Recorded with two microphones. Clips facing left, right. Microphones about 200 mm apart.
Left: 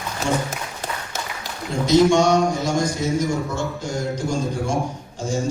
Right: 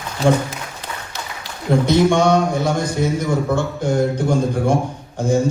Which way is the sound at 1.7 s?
60° right (ahead or behind).